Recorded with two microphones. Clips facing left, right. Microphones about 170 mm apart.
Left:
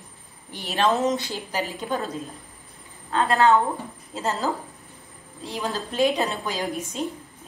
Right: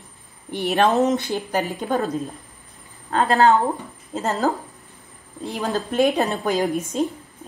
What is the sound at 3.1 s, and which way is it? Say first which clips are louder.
A woman's voice: right 2 dB; 40° right (ahead or behind).